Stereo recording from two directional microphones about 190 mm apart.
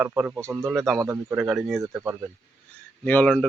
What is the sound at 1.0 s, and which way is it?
Speech, 15° right (ahead or behind).